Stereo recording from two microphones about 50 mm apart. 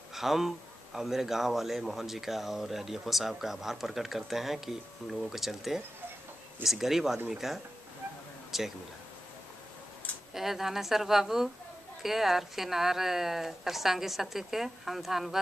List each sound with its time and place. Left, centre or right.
0.1 s speech: centre
8.5 s a sound: centre
10.3 s speech: centre